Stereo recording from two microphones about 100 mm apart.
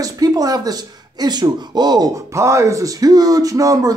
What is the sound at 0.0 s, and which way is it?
Speech, 40° right (ahead or behind).